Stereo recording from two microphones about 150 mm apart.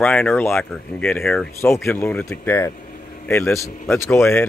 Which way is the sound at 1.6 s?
20° left (ahead or behind).